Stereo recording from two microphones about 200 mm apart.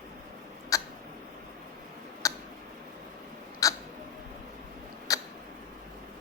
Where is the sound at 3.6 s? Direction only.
15° left (ahead or behind).